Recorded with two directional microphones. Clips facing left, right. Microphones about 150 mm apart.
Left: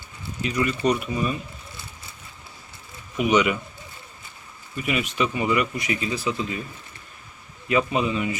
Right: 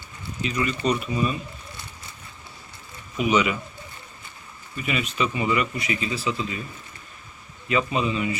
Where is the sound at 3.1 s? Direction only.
55° left (ahead or behind).